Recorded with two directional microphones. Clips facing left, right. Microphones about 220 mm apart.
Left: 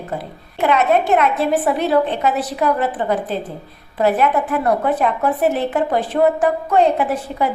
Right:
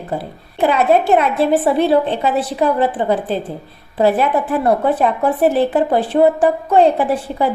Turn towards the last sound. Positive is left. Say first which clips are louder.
# right 2 dB
turn(degrees=-30)  # may be behind; listen again after turning